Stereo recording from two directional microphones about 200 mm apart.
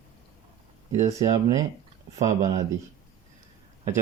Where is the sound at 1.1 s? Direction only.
15° right (ahead or behind).